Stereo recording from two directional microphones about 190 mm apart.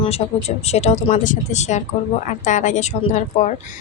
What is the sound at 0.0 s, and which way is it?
A woman's voice, 30° left (ahead or behind).